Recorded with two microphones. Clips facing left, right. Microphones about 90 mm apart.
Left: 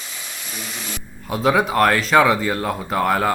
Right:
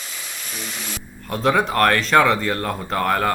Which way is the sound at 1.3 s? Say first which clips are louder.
Left 1 dB; 5° left (ahead or behind).